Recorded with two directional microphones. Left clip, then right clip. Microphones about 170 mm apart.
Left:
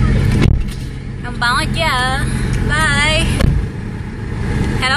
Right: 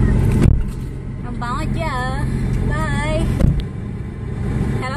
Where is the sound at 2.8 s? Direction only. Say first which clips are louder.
Left 9 dB; 30° right (ahead or behind).